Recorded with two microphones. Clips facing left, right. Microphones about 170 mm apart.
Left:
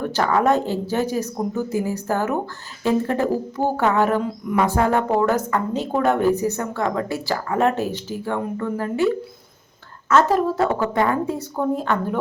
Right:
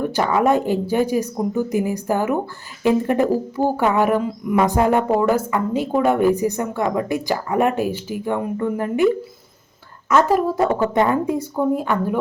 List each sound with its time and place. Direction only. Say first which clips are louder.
0.0 s a woman's voice: right 1 dB; 10° right (ahead or behind)
10.1 s a woman's voice: right 1 dB; 15° right (ahead or behind)